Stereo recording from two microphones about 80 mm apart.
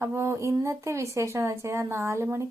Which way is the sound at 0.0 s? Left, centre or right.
Right.